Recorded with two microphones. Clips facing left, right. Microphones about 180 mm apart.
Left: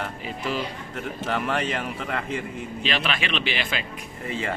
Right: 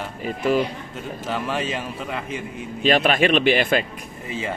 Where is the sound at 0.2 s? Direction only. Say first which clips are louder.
Right 12 dB; 50° right (ahead or behind).